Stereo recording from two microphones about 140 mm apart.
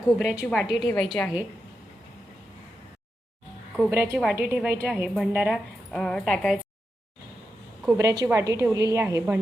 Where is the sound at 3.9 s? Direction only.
15° right (ahead or behind).